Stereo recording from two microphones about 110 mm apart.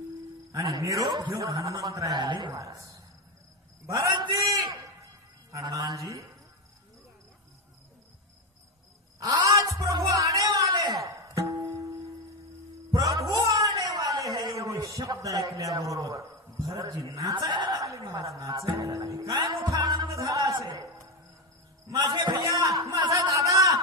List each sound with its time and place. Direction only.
0.5 s a man's voice: 30° right (ahead or behind)
2.5 s a man's voice: 30° right (ahead or behind)
4.1 s a sound: 40° right (ahead or behind)
5.5 s a man's voice: 30° right (ahead or behind)
9.4 s music: 30° right (ahead or behind)
12.9 s music: 30° right (ahead or behind)
14.3 s a sound: 35° right (ahead or behind)
18.4 s music: 35° right (ahead or behind)
21.9 s a sound: 40° right (ahead or behind)